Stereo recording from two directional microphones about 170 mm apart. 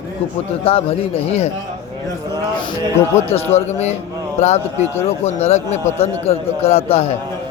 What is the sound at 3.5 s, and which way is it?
A man's voice, 40° left (ahead or behind).